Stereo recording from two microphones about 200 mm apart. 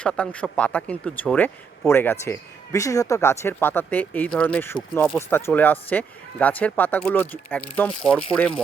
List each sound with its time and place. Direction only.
0.0 s speech: 5° left (ahead or behind)